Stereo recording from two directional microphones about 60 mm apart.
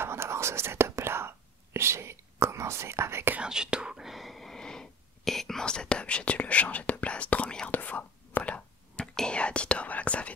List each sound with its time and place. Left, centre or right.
0.0 s whispering: right
3.4 s whispering: centre
4.1 s whispering: centre; by 9.0 s left
9.0 s whispering: centre
9.3 s whispering: centre